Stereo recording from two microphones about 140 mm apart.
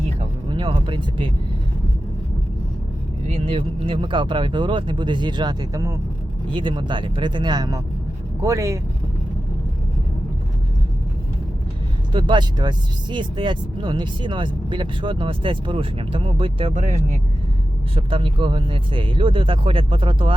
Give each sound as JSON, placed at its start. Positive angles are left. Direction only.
{"t": 0.5, "sound": "speech", "side_deg": -35}
{"t": 3.2, "sound": "speech", "side_deg": -50}
{"t": 6.5, "sound": "speech", "side_deg": -35}
{"t": 12.1, "sound": "speech", "side_deg": -35}
{"t": 16.7, "sound": "speech", "side_deg": -55}
{"t": 17.9, "sound": "speech", "side_deg": -40}